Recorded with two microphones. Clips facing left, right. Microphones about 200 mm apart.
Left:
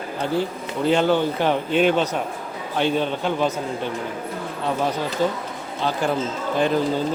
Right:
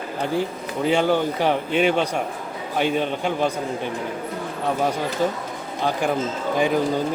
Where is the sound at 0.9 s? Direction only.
10° right (ahead or behind).